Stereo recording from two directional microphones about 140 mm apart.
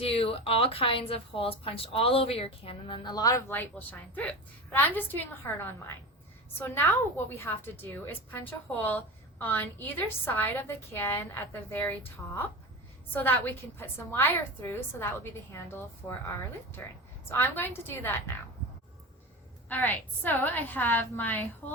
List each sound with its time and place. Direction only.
0.0 s speech: 45° left (ahead or behind); by 3.4 s 25° left (ahead or behind)
3.5 s a woman's voice: 15° left (ahead or behind)
19.6 s a woman's voice: 15° left (ahead or behind)
21.6 s a sound: 15° left (ahead or behind)